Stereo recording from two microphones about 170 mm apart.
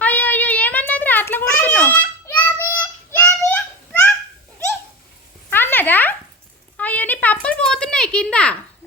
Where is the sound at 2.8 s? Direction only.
10° left (ahead or behind).